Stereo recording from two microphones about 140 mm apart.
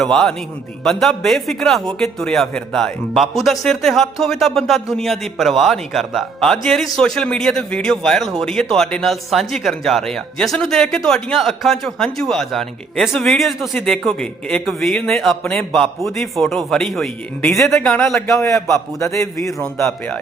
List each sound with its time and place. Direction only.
0.0 s a man's voice: 5° left (ahead or behind)
18.9 s a man's voice: 20° left (ahead or behind)